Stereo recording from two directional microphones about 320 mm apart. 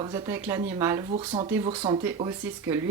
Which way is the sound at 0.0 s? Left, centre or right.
Centre.